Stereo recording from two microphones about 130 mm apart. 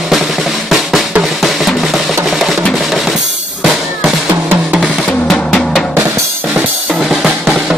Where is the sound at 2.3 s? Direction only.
Centre (ahead or behind).